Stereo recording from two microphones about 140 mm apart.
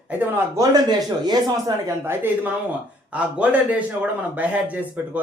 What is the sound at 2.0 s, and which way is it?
A man's voice, 15° right (ahead or behind).